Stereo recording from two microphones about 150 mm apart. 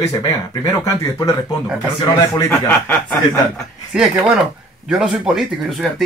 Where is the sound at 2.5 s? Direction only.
10° left (ahead or behind).